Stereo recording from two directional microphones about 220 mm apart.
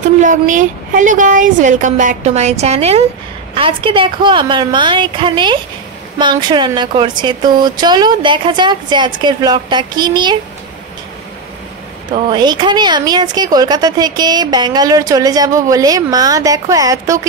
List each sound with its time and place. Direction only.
0.2 s speech: 35° right (ahead or behind); by 10.3 s 20° right (ahead or behind)
12.1 s speech: 20° right (ahead or behind)